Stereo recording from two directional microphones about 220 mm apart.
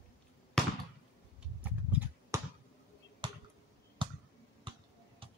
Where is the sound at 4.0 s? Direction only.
20° right (ahead or behind).